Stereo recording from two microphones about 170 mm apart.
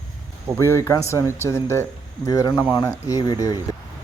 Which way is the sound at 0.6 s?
15° left (ahead or behind).